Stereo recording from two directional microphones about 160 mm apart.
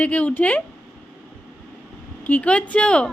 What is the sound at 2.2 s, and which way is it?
Speech, 10° left (ahead or behind).